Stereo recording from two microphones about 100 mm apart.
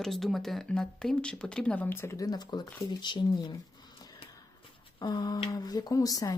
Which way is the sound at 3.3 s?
45° left (ahead or behind).